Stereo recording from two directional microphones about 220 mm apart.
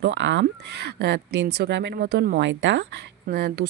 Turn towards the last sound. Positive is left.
turn(degrees=-45)  # may be behind; listen again after turning